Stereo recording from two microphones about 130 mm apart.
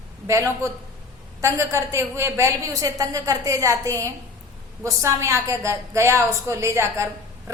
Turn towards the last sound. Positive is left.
turn(degrees=-20)  # may be behind; listen again after turning